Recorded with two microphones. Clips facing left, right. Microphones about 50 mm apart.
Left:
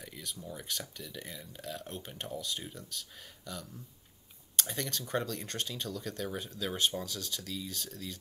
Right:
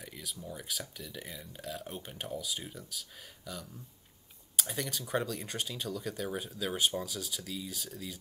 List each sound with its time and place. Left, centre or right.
0.0 s speech: centre